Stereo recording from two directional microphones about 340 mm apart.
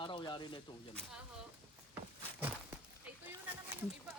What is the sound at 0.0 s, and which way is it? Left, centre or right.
Speech, centre.